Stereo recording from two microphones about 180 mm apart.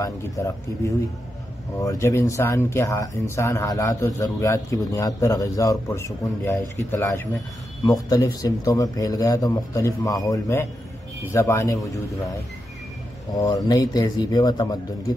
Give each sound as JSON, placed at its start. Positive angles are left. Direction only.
{"t": 0.0, "sound": "a man's voice", "side_deg": 20}